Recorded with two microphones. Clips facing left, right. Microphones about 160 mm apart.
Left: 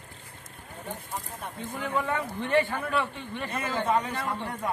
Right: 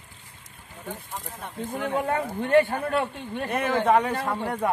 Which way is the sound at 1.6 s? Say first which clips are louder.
Right 6 dB; 55° right (ahead or behind).